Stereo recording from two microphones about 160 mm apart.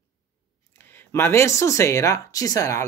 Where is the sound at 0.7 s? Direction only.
15° left (ahead or behind).